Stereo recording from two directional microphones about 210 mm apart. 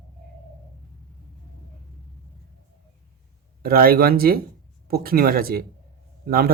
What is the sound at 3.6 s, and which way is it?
Speech, 45° right (ahead or behind).